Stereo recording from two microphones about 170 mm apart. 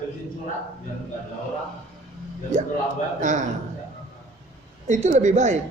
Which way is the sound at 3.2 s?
45° right (ahead or behind).